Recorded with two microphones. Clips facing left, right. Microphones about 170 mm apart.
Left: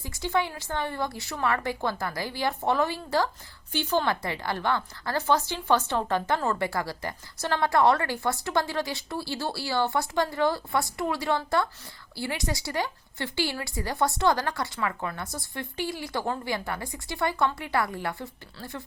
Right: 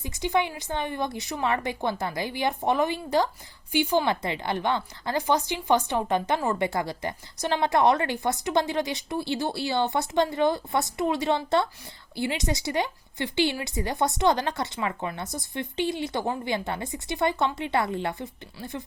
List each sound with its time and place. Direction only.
0.0 s speech: 20° right (ahead or behind)